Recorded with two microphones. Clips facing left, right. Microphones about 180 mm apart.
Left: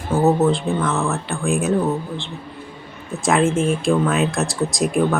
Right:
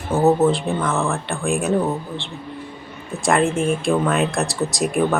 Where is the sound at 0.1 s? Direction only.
Centre (ahead or behind).